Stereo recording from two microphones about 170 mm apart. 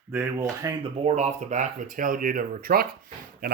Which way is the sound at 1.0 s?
45° right (ahead or behind).